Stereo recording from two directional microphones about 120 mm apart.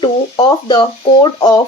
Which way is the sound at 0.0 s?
35° left (ahead or behind).